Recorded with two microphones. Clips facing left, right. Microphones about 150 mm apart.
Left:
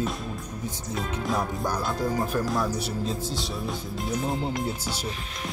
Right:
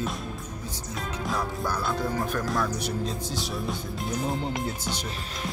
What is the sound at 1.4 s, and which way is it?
Music, 15° left (ahead or behind).